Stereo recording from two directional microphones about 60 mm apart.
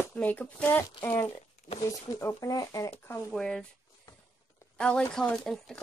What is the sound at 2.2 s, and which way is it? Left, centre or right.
Speech, left.